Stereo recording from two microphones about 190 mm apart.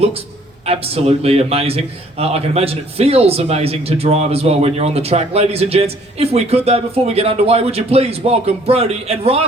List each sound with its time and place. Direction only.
0.6 s a man's voice: 30° right (ahead or behind)